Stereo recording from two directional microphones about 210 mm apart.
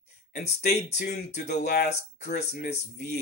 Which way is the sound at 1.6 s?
50° left (ahead or behind).